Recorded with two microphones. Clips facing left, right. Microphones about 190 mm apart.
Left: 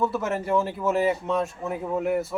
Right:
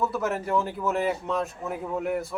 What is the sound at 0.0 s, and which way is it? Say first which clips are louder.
A man's voice: left 1 dB; centre (ahead or behind).